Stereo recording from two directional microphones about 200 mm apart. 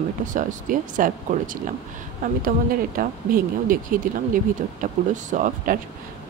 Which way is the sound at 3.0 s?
45° right (ahead or behind).